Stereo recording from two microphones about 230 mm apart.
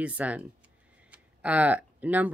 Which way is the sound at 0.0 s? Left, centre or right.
Centre.